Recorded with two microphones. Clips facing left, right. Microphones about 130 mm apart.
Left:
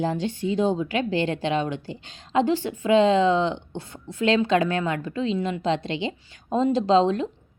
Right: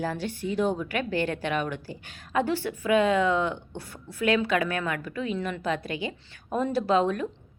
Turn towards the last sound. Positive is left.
turn(degrees=25)  # may be behind; listen again after turning